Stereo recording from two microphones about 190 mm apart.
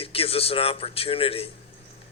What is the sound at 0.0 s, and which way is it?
Speech, 30° left (ahead or behind).